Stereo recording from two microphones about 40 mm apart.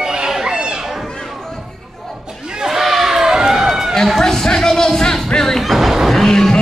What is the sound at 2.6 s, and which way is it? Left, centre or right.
Run, centre.